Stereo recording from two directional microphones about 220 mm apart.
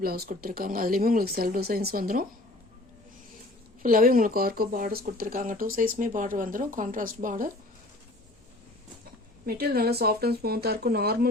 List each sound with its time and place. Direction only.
0.0 s speech: 40° right (ahead or behind)
3.8 s speech: 40° right (ahead or behind)
9.5 s speech: 45° right (ahead or behind)